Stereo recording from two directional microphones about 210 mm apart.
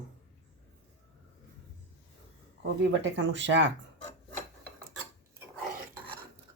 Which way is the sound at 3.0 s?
60° right (ahead or behind).